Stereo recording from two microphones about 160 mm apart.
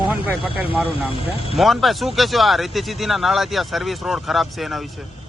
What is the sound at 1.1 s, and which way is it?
Speech, 35° left (ahead or behind).